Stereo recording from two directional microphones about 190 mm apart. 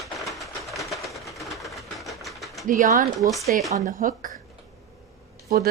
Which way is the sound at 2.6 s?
45° right (ahead or behind).